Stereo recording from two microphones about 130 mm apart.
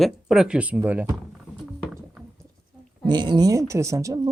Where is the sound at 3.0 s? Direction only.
35° right (ahead or behind).